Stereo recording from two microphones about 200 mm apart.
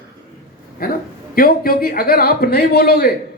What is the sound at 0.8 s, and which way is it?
Speech, 45° left (ahead or behind).